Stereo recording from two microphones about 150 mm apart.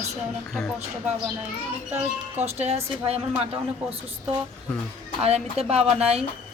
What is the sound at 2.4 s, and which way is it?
Speech, 45° right (ahead or behind).